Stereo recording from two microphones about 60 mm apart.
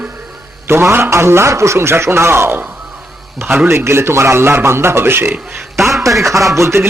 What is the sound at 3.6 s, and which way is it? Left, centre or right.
A man's voice, right.